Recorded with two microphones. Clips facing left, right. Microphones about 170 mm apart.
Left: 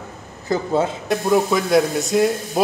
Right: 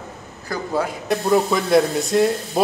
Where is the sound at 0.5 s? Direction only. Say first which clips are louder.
Left 4 dB; 25° left (ahead or behind).